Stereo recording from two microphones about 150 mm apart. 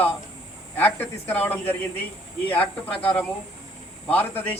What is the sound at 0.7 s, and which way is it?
A man's voice, 10° left (ahead or behind).